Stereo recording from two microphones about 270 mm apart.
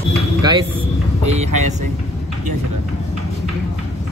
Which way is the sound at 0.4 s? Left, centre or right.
Centre.